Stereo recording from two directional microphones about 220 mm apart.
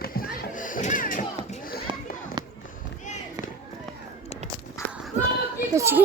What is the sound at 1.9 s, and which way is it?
Children playing, 20° right (ahead or behind).